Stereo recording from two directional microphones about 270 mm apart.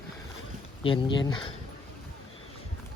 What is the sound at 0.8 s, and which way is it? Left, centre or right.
Speech, centre.